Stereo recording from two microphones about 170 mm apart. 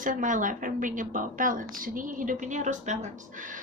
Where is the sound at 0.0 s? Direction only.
50° right (ahead or behind).